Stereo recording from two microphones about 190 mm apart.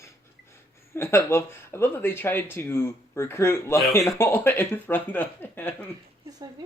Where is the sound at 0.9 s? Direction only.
10° left (ahead or behind).